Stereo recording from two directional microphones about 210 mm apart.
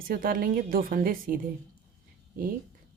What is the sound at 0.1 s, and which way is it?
A woman's voice, 40° right (ahead or behind).